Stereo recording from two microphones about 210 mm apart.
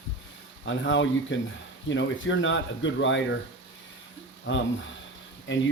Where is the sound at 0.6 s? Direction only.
60° left (ahead or behind).